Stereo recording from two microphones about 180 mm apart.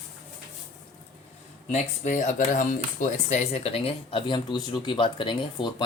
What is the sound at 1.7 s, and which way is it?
Speech, 40° left (ahead or behind).